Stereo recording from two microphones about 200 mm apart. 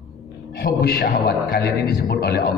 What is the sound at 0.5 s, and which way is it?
A man's voice, 50° left (ahead or behind).